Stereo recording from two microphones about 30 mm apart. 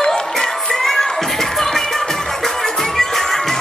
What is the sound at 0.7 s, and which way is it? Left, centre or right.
Music, centre.